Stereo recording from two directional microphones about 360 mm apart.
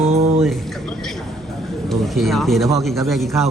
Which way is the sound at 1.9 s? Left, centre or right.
Centre.